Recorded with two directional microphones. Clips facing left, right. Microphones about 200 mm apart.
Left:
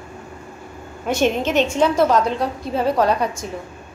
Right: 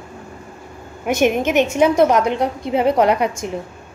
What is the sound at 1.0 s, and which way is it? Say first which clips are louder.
A woman's voice: right 2 dB; 15° right (ahead or behind).